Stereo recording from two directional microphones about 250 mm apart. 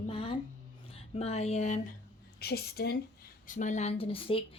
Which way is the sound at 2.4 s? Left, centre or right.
Left.